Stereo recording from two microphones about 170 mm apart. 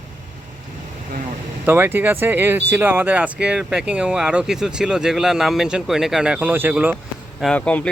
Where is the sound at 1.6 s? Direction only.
10° right (ahead or behind).